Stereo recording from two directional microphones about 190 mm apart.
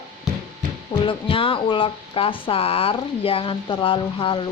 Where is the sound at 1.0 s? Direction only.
30° left (ahead or behind).